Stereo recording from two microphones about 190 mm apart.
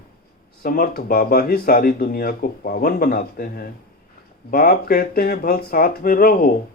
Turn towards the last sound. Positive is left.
turn(degrees=50)  # may be behind; listen again after turning